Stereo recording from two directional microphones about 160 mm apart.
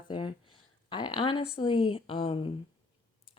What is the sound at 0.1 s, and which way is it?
Speech, 30° left (ahead or behind).